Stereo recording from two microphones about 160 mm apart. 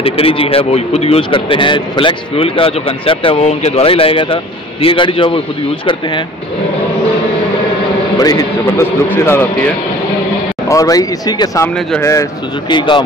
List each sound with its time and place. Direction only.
0.0 s a man's voice: 35° left (ahead or behind)
8.2 s a man's voice: 25° left (ahead or behind)
10.7 s speech: 20° left (ahead or behind)